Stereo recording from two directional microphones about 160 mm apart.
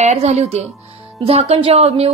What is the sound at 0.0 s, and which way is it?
A woman's voice, 40° right (ahead or behind).